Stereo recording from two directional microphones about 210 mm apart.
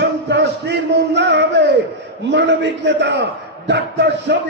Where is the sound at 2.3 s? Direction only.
55° right (ahead or behind).